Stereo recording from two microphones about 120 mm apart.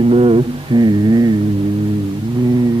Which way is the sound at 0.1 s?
50° right (ahead or behind).